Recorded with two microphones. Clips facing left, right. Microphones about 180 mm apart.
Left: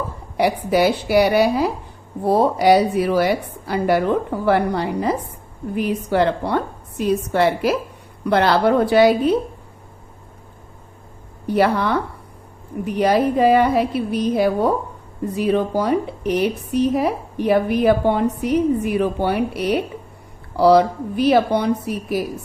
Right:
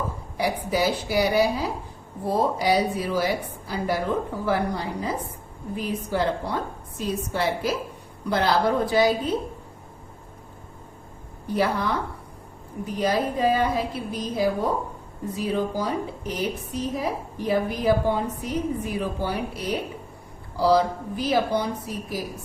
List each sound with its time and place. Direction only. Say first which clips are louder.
0.3 s speech: left 7 dB; 70° left (ahead or behind)
11.4 s a woman's voice: left 6 dB; 70° left (ahead or behind)